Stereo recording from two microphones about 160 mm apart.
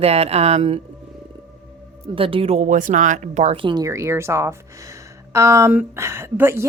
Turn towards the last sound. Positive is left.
turn(degrees=-15)  # may be behind; listen again after turning